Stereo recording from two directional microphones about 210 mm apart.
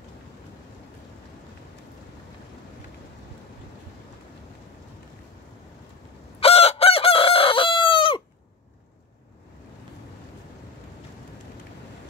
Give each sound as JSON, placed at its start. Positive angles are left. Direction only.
{"t": 6.4, "sound": "chicken", "side_deg": 30}